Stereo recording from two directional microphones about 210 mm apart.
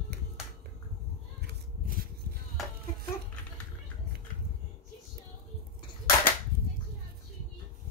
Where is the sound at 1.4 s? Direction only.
45° right (ahead or behind).